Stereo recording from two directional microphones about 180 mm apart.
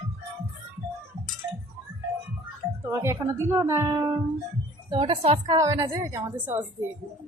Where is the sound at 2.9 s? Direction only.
15° right (ahead or behind).